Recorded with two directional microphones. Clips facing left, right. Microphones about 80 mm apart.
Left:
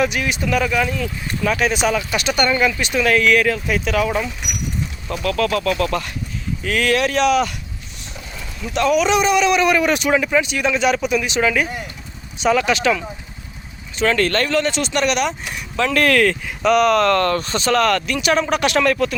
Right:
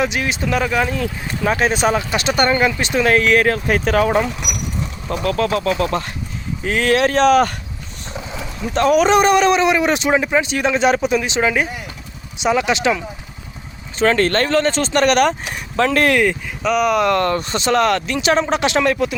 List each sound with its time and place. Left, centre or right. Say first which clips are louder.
0.0 s speech: even; right
5.0 s speech: right 1 dB; right
8.6 s speech: right 3 dB; right
9.6 s speech: right 1 dB; right
14.0 s speech: right 2 dB; right
16.1 s speech: even; centre